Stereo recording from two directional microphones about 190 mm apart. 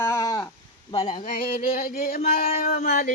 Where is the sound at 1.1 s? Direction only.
45° left (ahead or behind).